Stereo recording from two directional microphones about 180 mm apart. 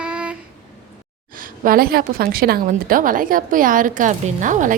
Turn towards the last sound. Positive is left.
turn(degrees=-45)  # may be behind; listen again after turning